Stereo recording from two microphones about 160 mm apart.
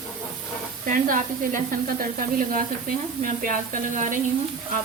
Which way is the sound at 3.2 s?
55° right (ahead or behind).